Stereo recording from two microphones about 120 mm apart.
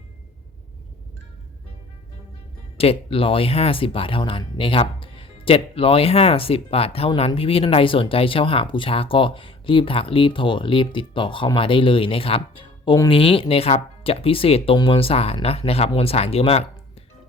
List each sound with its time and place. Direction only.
2.7 s speech: 55° left (ahead or behind)